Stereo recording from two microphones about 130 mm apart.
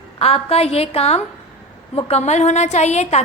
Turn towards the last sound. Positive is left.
turn(degrees=60)  # may be behind; listen again after turning